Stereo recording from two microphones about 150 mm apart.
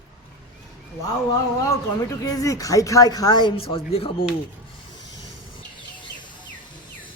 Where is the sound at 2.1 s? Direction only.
25° left (ahead or behind).